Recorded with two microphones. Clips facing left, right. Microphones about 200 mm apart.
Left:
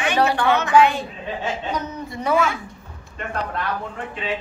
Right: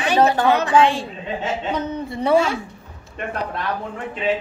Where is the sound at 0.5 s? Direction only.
30° right (ahead or behind).